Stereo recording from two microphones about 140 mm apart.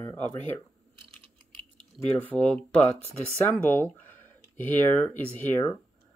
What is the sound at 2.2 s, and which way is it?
Speech, 10° left (ahead or behind).